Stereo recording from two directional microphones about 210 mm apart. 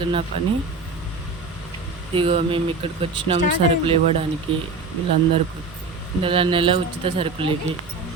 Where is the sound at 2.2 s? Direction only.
25° right (ahead or behind).